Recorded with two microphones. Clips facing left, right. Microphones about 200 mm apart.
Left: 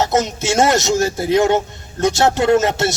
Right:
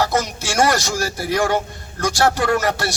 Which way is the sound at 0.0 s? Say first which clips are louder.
Left 3 dB; 20° left (ahead or behind).